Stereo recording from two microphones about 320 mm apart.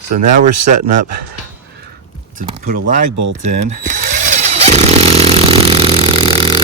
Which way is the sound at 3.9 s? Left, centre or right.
Right.